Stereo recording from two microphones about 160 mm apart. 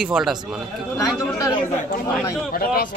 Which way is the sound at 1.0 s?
20° left (ahead or behind).